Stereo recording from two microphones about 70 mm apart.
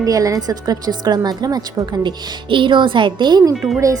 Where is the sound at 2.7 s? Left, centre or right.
Right.